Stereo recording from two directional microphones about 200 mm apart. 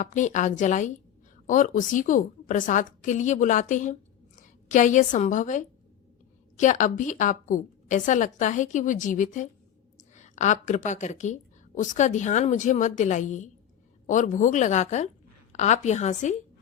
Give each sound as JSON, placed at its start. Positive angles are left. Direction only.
{"t": 0.0, "sound": "a woman's voice", "side_deg": 40}